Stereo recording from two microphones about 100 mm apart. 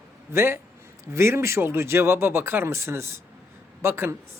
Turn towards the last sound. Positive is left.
turn(degrees=-25)  # may be behind; listen again after turning